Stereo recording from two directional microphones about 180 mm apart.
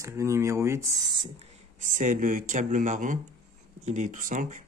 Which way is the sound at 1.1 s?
30° right (ahead or behind).